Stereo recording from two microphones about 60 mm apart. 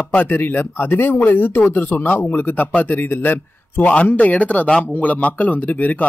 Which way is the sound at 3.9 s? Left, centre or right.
Left.